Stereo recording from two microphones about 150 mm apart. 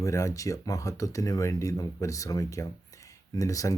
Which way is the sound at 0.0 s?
20° left (ahead or behind).